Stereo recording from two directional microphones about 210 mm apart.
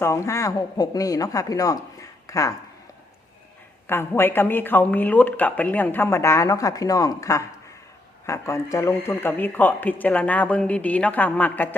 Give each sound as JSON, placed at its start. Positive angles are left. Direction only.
{"t": 0.0, "sound": "speech", "side_deg": 15}
{"t": 3.8, "sound": "speech", "side_deg": 10}